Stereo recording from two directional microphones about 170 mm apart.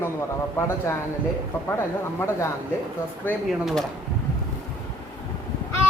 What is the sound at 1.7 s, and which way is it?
Speech, 15° left (ahead or behind).